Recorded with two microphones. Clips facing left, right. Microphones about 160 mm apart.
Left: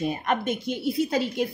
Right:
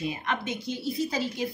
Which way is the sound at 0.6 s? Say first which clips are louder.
Left 4 dB; 60° left (ahead or behind).